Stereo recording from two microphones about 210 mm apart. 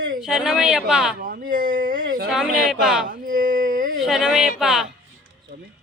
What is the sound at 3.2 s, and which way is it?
Speech, 40° right (ahead or behind).